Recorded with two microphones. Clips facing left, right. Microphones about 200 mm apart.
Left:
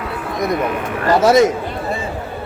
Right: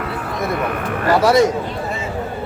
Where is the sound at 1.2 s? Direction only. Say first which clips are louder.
Left 2 dB; 20° left (ahead or behind).